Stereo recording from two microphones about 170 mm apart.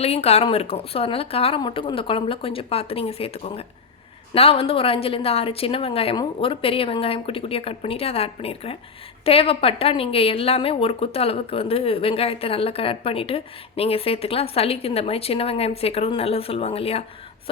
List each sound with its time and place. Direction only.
0.0 s a woman's voice: 35° left (ahead or behind)